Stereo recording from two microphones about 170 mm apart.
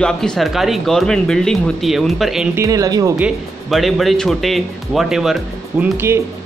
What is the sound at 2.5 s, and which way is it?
Speech, 20° right (ahead or behind).